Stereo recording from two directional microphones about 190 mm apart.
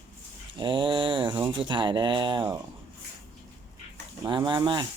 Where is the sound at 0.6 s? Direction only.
25° right (ahead or behind).